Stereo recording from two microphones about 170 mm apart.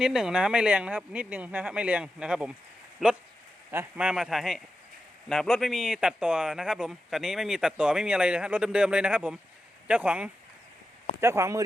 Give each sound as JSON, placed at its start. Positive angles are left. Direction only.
{"t": 0.0, "sound": "a man's voice", "side_deg": -5}